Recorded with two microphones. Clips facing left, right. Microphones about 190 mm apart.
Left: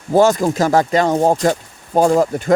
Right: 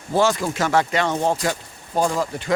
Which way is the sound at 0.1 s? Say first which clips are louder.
Left 7 dB; 45° left (ahead or behind).